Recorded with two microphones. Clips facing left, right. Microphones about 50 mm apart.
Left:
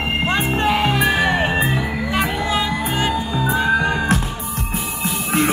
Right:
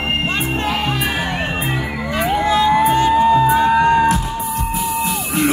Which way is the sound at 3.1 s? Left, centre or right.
Right.